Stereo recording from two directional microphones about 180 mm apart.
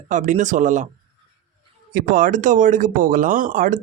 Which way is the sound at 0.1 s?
45° right (ahead or behind).